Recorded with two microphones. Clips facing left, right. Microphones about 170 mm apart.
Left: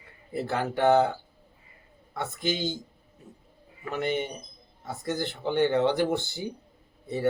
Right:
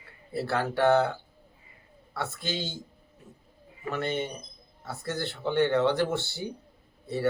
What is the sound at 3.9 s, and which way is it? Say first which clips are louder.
Speech: left 1 dB; 15° left (ahead or behind).